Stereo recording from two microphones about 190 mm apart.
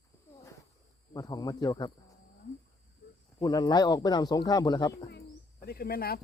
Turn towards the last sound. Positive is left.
turn(degrees=50)  # may be behind; listen again after turning